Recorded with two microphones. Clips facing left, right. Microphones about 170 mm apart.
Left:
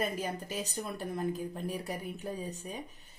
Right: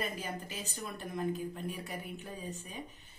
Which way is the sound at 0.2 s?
40° left (ahead or behind).